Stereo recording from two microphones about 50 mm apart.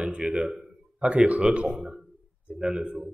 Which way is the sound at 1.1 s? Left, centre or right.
Right.